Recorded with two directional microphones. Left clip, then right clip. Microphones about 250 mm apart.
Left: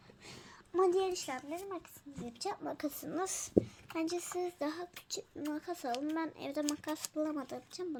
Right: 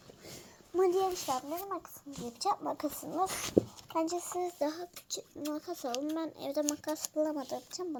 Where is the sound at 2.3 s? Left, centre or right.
Centre.